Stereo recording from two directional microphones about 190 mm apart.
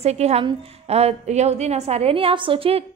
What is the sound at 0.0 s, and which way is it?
A woman's voice, 35° right (ahead or behind).